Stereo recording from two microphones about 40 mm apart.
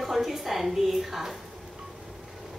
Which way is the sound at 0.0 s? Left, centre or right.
Centre.